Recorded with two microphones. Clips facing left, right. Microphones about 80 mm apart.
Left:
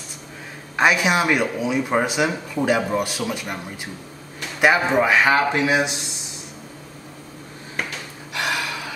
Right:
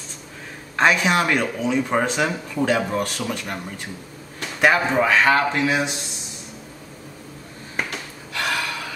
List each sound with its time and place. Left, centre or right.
0.7 s speech: centre
8.3 s gasp: centre